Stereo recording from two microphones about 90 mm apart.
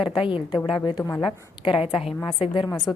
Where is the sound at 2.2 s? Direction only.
65° left (ahead or behind).